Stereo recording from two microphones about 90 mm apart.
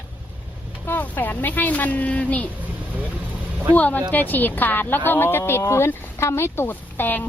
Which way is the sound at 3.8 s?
15° left (ahead or behind).